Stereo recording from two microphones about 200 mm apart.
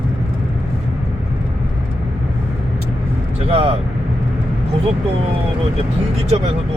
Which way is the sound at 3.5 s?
30° right (ahead or behind).